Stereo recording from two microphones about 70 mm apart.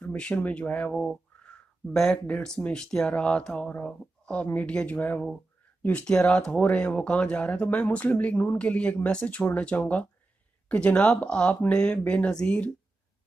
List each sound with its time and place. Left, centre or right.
0.0 s speech: centre
1.9 s speech: centre